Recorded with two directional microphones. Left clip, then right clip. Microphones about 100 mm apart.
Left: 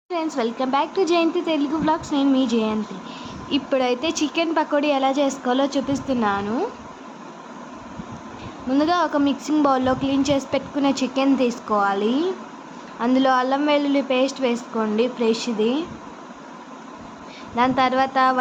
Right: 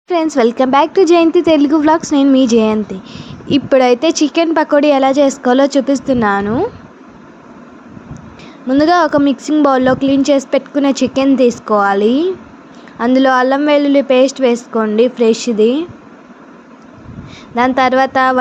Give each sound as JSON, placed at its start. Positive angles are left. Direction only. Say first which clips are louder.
{"t": 0.1, "sound": "speech", "louder": "right 12 dB", "side_deg": -90}
{"t": 8.8, "sound": "a woman's voice", "louder": "right 9 dB", "side_deg": -70}
{"t": 17.5, "sound": "a woman's voice", "louder": "right 8 dB", "side_deg": -65}